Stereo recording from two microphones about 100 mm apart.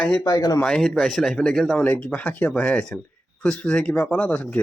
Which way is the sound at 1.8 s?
15° left (ahead or behind).